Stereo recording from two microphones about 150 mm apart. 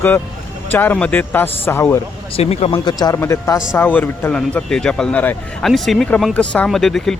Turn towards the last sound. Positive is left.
turn(degrees=0)  # may be behind; listen again after turning